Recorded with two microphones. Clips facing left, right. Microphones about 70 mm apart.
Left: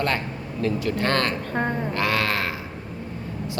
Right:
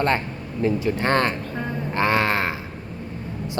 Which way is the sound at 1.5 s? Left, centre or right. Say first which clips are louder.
Left 4 dB; left.